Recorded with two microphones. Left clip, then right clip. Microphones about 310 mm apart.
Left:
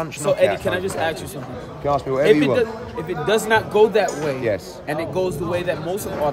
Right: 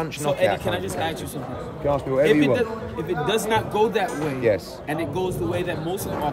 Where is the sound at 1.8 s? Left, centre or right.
Centre.